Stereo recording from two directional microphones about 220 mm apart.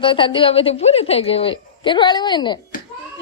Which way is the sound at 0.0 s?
20° left (ahead or behind).